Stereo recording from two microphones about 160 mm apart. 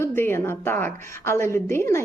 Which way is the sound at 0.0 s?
15° left (ahead or behind).